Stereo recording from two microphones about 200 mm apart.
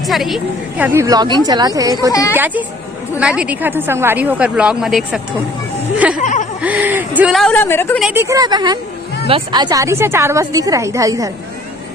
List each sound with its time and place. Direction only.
0.1 s a woman's voice: centre (ahead or behind)
0.9 s speech: 20° right (ahead or behind); by 5.2 s centre (ahead or behind)
6.2 s a sound: 40° left (ahead or behind)
6.6 s a woman's voice: 10° right (ahead or behind); by 7.9 s 10° left (ahead or behind)
8.1 s speech: 15° right (ahead or behind)